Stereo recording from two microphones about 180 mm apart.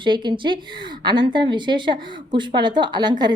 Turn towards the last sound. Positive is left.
turn(degrees=-25)  # may be behind; listen again after turning